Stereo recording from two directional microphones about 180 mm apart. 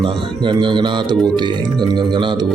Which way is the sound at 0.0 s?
25° right (ahead or behind).